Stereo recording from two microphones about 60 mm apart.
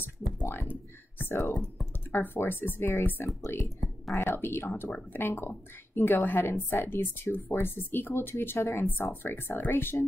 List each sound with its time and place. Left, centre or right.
0.0 s a sound: left
1.1 s speech: left
4.4 s speech: left